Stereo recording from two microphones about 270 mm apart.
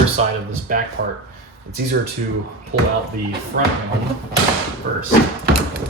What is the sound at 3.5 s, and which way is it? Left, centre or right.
Speech, right.